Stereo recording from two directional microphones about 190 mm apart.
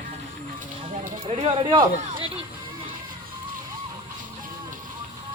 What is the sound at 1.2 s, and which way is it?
Speech, 30° right (ahead or behind).